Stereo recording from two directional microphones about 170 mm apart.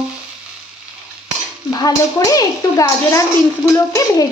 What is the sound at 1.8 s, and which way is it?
Speech, 20° left (ahead or behind).